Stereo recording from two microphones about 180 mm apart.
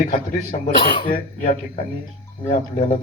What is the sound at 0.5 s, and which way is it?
A man's voice, 45° left (ahead or behind).